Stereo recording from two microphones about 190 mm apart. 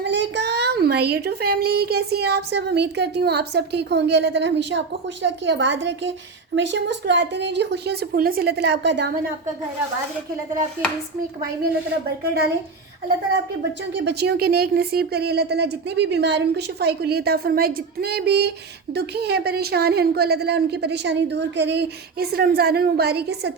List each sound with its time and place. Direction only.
0.0 s a child's voice: 65° right (ahead or behind)
13.9 s a child's voice: 65° right (ahead or behind)